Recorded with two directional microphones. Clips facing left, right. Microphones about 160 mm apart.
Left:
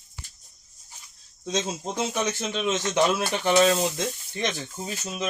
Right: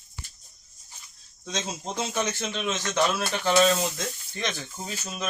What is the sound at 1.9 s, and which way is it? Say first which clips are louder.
Speech: left 1 dB; 15° left (ahead or behind).